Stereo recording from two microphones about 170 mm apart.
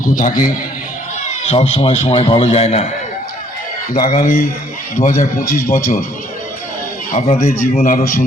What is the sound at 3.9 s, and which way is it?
A man's voice, 55° left (ahead or behind).